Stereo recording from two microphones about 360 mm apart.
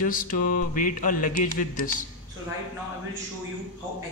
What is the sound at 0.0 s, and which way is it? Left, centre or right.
A man's voice, left.